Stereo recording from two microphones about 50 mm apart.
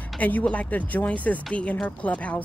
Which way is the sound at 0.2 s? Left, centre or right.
Left.